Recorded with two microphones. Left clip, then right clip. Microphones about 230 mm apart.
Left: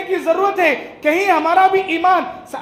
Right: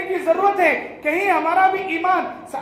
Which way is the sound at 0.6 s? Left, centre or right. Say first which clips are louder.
Left 2 dB; left.